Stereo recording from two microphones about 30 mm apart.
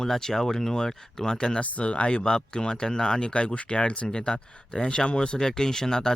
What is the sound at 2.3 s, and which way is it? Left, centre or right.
Speech, left.